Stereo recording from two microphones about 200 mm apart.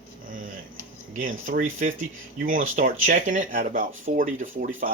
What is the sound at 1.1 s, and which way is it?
Speech, 45° right (ahead or behind).